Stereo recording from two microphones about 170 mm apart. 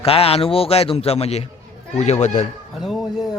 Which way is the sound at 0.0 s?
35° left (ahead or behind).